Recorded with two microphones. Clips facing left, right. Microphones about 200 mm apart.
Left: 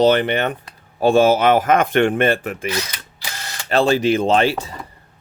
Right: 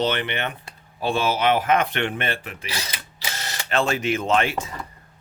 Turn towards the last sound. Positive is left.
turn(degrees=35)  # may be behind; listen again after turning